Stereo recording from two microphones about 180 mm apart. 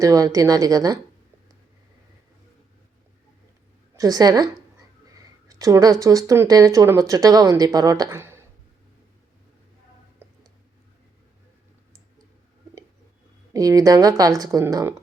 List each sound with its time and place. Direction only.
0.0 s speech: 20° right (ahead or behind)
3.9 s speech: 20° right (ahead or behind)
5.5 s speech: 20° right (ahead or behind)
10.2 s a sound: 15° right (ahead or behind)
13.5 s speech: 20° right (ahead or behind)